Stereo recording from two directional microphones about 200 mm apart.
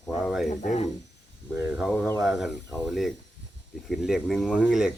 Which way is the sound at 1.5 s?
10° right (ahead or behind).